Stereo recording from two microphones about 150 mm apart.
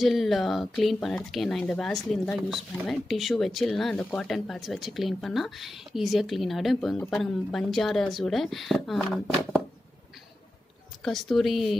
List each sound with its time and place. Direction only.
0.0 s speech: centre (ahead or behind)
11.1 s speech: centre (ahead or behind)